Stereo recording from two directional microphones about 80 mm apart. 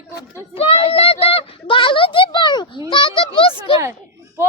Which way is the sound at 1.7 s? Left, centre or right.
Left.